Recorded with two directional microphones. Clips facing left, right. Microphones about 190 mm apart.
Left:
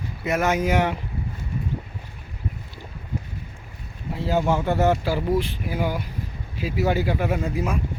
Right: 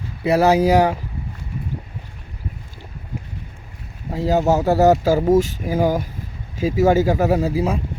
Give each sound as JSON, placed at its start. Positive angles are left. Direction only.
{"t": 0.3, "sound": "speech", "side_deg": -35}
{"t": 4.1, "sound": "speech", "side_deg": -40}